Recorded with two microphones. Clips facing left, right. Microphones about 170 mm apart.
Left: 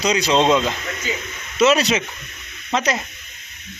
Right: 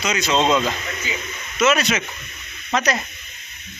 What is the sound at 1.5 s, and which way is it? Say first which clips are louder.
A man's voice: left 3 dB; 35° left (ahead or behind).